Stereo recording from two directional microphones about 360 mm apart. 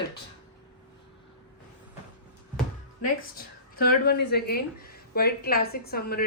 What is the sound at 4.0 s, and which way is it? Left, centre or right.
A woman's voice, left.